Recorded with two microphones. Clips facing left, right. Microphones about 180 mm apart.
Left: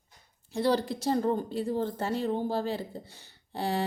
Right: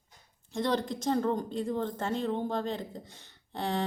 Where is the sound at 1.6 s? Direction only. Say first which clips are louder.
Left 2 dB; 35° left (ahead or behind).